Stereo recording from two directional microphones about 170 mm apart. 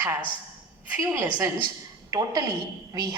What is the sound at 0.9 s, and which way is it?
Speech, 15° right (ahead or behind).